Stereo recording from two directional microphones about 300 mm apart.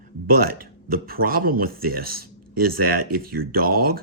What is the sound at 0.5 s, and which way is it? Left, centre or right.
Speech, right.